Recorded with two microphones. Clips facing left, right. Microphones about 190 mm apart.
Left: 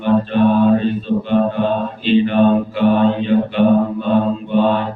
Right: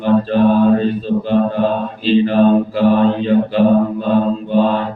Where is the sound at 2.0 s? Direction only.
35° right (ahead or behind).